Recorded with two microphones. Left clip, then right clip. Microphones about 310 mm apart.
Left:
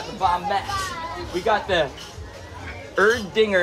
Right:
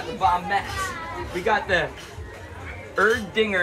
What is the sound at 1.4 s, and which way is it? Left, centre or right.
Speech, centre.